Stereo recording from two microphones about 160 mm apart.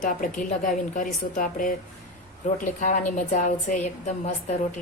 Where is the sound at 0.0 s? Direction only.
55° left (ahead or behind).